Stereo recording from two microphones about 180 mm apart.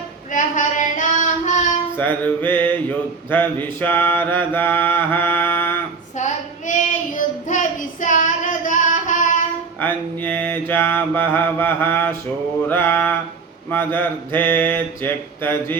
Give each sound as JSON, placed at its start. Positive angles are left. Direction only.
{"t": 0.3, "sound": "child singing", "side_deg": 45}
{"t": 2.0, "sound": "mantra", "side_deg": 10}
{"t": 6.1, "sound": "child singing", "side_deg": 45}
{"t": 9.8, "sound": "mantra", "side_deg": 10}